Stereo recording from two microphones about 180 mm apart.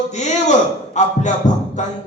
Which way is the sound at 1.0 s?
40° left (ahead or behind).